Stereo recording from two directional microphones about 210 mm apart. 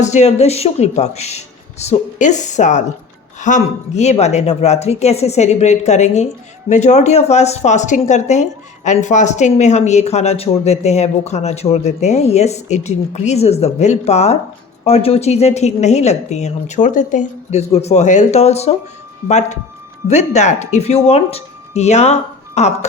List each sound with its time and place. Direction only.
0.0 s speech: 35° left (ahead or behind)